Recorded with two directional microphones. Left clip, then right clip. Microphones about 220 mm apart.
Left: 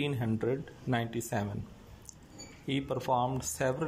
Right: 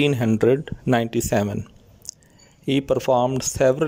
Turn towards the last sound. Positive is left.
turn(degrees=-50)  # may be behind; listen again after turning